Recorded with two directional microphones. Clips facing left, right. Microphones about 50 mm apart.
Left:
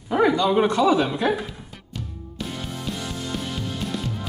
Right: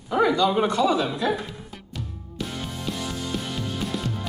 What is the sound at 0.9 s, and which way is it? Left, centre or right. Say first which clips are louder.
Speech: left 3 dB; left.